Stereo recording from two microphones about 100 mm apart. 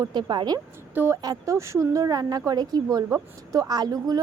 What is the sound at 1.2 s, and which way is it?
Speech, 35° right (ahead or behind).